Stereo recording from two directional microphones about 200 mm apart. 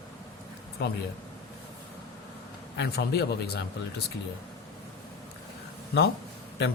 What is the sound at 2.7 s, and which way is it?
Speech, 55° left (ahead or behind).